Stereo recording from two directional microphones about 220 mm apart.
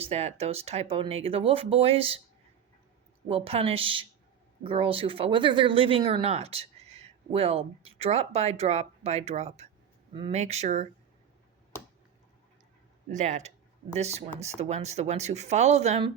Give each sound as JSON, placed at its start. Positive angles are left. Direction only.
{"t": 0.0, "sound": "speech", "side_deg": -30}
{"t": 3.2, "sound": "speech", "side_deg": -25}
{"t": 13.1, "sound": "speech", "side_deg": -30}